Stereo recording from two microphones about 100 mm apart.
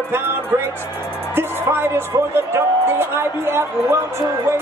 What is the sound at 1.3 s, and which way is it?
Music, 20° right (ahead or behind).